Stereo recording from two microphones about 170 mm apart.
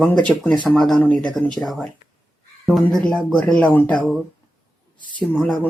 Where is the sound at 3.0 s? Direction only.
5° left (ahead or behind).